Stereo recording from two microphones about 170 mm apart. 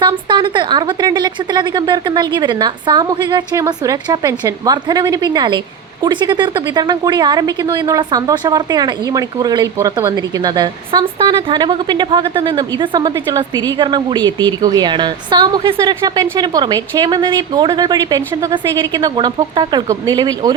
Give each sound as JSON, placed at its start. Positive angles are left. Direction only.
{"t": 0.0, "sound": "speech", "side_deg": -25}